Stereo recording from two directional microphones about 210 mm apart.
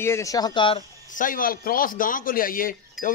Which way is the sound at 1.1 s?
40° left (ahead or behind).